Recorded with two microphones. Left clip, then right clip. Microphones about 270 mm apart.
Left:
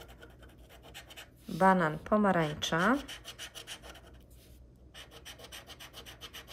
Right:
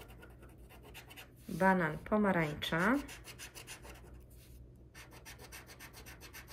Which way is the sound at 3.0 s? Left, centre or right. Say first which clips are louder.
Left 5 dB; centre.